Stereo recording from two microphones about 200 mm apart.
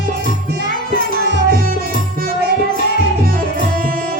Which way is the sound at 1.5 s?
45° right (ahead or behind).